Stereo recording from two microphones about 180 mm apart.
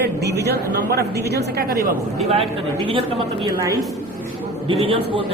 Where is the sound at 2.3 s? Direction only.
30° right (ahead or behind).